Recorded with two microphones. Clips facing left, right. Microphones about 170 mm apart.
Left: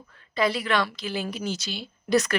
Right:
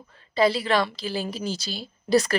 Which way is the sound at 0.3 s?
30° right (ahead or behind).